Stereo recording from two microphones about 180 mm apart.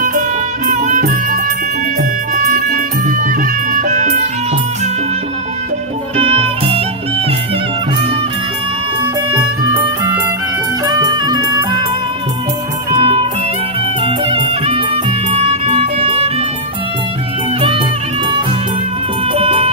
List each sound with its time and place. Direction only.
0.0 s music: 50° right (ahead or behind)
6.1 s music: 35° right (ahead or behind)
9.3 s music: 15° right (ahead or behind)
10.8 s clarinet: 20° right (ahead or behind)
12.9 s music: 30° right (ahead or behind)
17.6 s music: 30° right (ahead or behind)
19.3 s music: 30° right (ahead or behind)